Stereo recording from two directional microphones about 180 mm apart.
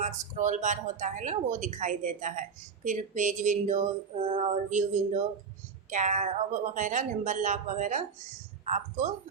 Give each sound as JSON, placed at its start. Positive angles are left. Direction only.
{"t": 0.0, "sound": "speech", "side_deg": -40}
{"t": 4.4, "sound": "a sound", "side_deg": -40}
{"t": 5.9, "sound": "speech", "side_deg": -45}